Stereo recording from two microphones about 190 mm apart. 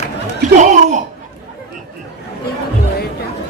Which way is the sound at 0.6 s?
40° right (ahead or behind).